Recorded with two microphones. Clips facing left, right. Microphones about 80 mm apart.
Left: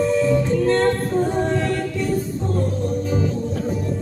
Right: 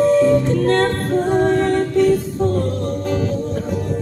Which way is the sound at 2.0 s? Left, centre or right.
Right.